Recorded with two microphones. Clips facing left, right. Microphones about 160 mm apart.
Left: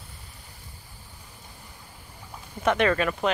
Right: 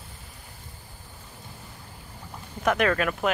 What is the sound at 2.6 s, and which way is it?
Speech, centre (ahead or behind).